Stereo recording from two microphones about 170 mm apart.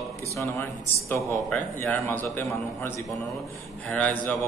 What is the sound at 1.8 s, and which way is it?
A man's voice, 10° left (ahead or behind).